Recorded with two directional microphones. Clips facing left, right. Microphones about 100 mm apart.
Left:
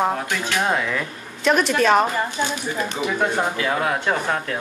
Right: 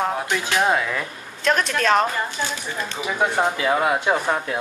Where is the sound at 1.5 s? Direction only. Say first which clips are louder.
Left 2 dB; 5° left (ahead or behind).